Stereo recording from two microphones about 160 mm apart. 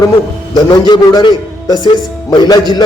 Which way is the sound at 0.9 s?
25° left (ahead or behind).